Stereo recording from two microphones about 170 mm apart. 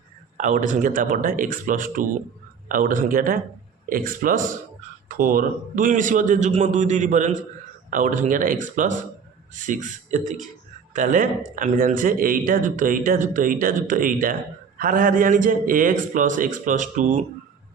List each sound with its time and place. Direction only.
0.3 s speech: 50° right (ahead or behind)